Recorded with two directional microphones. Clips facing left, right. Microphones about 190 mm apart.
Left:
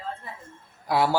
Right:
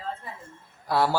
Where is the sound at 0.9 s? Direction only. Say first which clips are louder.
Left 1 dB; 15° left (ahead or behind).